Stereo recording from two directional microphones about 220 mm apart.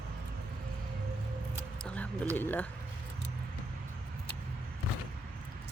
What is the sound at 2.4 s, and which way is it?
Speech, 10° left (ahead or behind).